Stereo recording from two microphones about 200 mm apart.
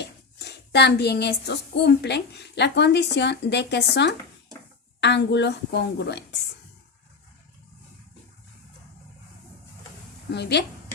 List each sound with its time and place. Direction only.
0.0 s a woman's voice: 55° left (ahead or behind)
10.3 s a woman's voice: 55° left (ahead or behind)